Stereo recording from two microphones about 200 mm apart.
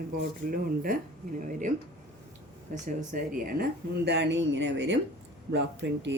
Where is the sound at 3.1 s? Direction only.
45° right (ahead or behind).